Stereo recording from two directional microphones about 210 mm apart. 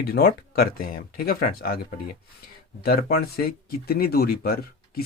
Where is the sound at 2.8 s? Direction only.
45° left (ahead or behind).